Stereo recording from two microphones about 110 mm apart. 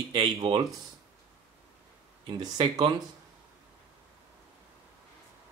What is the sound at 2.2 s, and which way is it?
Speech, 40° right (ahead or behind).